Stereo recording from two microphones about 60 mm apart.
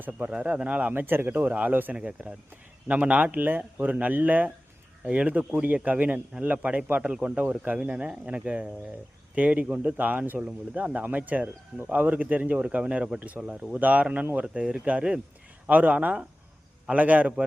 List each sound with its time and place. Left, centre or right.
0.3 s speech: centre
14.4 s speech: centre